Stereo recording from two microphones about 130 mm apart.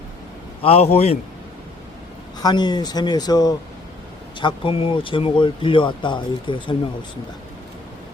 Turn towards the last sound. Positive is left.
turn(degrees=40)  # may be behind; listen again after turning